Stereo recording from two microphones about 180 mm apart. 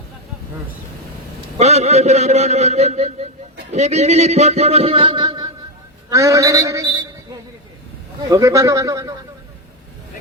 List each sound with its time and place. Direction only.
1.5 s a man's voice: 35° right (ahead or behind); by 7.1 s 20° right (ahead or behind)
8.3 s a man's voice: 20° right (ahead or behind)